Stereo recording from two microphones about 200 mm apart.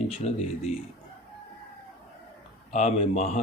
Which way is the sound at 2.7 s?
35° left (ahead or behind).